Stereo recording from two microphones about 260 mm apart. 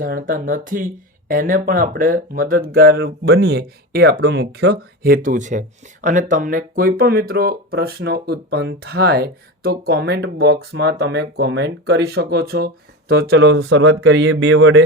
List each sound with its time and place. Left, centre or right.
0.0 s speech: right